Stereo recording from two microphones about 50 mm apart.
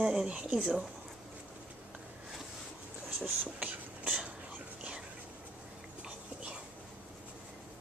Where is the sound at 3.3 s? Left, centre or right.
Right.